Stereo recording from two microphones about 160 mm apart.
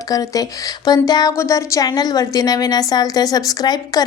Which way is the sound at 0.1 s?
20° left (ahead or behind).